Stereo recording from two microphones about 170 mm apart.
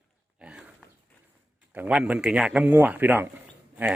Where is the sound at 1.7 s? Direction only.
5° right (ahead or behind).